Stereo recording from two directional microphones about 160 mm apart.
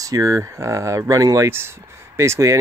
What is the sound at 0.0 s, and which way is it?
Speech, 20° right (ahead or behind).